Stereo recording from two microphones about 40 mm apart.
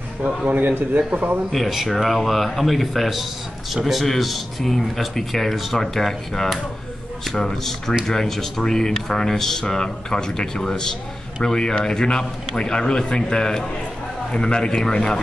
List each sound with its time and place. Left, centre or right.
0.5 s a man's voice: right
1.7 s a man's voice: centre